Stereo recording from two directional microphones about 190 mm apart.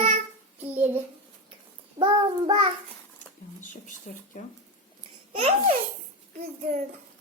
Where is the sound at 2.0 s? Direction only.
30° right (ahead or behind).